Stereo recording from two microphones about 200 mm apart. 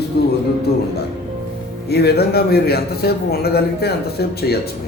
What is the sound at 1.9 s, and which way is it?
A man's voice, 55° left (ahead or behind).